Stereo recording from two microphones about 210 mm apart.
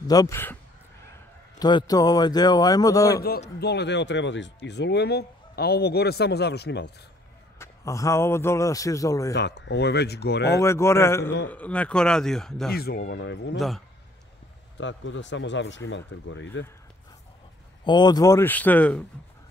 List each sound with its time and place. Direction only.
0.0 s a man's voice: 15° left (ahead or behind)
1.6 s a man's voice: 20° left (ahead or behind)
3.3 s speech: 50° left (ahead or behind)
7.5 s a man's voice: 15° left (ahead or behind)
9.3 s speech: 55° left (ahead or behind)
10.6 s a man's voice: 15° left (ahead or behind)
12.7 s speech: 45° left (ahead or behind)
13.6 s speech: centre (ahead or behind)
14.8 s speech: 60° left (ahead or behind)
17.8 s a man's voice: 20° left (ahead or behind)